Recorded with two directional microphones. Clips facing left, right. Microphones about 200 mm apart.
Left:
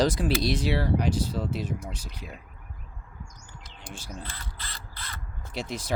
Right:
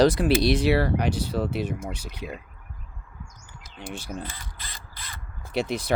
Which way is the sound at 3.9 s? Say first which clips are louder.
Right 6 dB; 65° right (ahead or behind).